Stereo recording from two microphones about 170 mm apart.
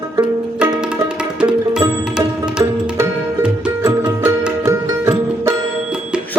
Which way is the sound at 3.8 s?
20° right (ahead or behind).